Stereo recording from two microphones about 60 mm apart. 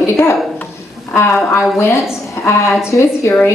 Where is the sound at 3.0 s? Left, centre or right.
Left.